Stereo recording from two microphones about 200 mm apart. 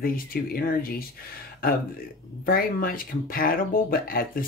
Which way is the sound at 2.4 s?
45° left (ahead or behind).